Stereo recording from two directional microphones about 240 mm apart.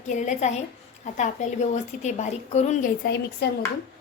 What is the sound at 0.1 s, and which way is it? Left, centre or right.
A woman's voice, left.